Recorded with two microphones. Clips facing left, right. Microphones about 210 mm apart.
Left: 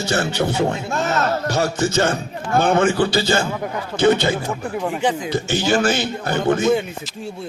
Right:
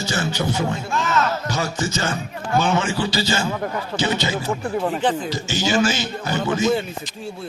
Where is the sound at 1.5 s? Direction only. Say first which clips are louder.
Left 4 dB; 60° left (ahead or behind).